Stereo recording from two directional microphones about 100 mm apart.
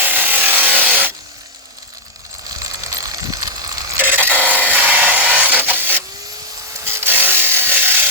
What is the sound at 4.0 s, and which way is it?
Wood, 20° right (ahead or behind).